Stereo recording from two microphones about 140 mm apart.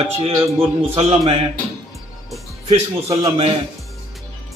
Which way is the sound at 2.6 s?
50° right (ahead or behind).